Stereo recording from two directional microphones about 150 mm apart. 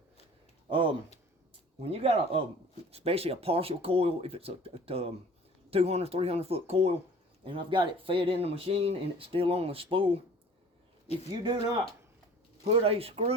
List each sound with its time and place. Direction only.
1.8 s speech: 40° right (ahead or behind)
11.3 s speech: 25° right (ahead or behind)
12.6 s speech: 40° right (ahead or behind)